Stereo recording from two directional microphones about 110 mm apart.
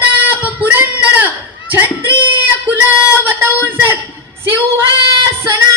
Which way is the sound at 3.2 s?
20° right (ahead or behind).